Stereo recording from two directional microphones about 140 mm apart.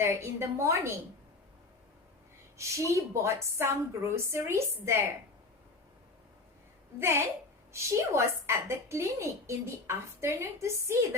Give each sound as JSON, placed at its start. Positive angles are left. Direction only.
{"t": 0.0, "sound": "a woman's voice", "side_deg": -20}
{"t": 2.6, "sound": "a woman's voice", "side_deg": -20}
{"t": 7.7, "sound": "a woman's voice", "side_deg": -20}